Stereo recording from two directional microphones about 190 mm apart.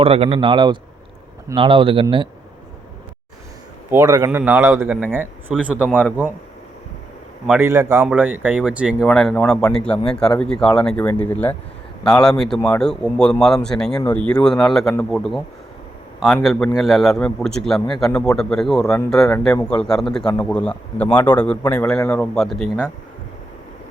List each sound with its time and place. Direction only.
0.0 s speech: 30° right (ahead or behind)
3.9 s a man's voice: 15° right (ahead or behind)
7.6 s a man's voice: 15° right (ahead or behind); by 22.3 s 15° left (ahead or behind)
22.4 s a man's voice: centre (ahead or behind)